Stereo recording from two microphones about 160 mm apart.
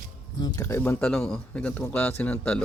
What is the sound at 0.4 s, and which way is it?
Speech, 25° left (ahead or behind).